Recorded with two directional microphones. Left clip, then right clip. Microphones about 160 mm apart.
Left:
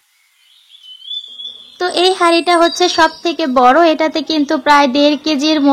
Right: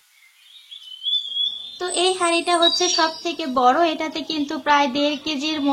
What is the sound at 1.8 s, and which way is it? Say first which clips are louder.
A child's voice: left 8 dB; 45° left (ahead or behind).